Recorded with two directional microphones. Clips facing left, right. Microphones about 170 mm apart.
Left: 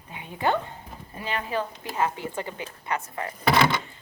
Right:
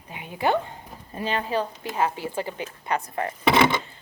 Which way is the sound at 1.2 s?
30° right (ahead or behind).